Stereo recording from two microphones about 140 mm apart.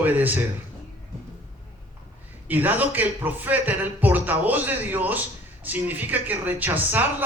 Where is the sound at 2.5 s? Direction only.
15° right (ahead or behind).